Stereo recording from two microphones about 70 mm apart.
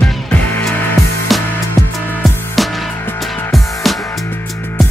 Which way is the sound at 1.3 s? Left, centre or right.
Centre.